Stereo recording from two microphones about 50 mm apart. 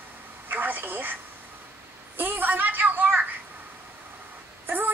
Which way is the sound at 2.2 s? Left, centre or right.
Right.